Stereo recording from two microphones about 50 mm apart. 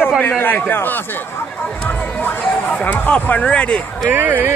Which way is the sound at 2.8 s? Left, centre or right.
Left.